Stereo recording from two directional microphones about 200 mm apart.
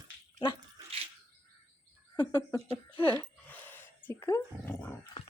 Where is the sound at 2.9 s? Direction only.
25° left (ahead or behind).